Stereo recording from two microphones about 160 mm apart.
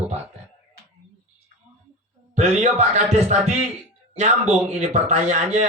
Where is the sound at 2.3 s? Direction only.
45° right (ahead or behind).